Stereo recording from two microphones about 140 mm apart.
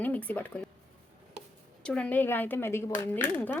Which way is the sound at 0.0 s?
10° left (ahead or behind).